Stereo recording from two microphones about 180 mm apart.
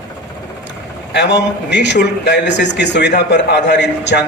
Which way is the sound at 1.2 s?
75° left (ahead or behind).